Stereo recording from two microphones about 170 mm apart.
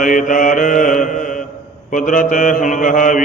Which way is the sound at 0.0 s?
50° left (ahead or behind).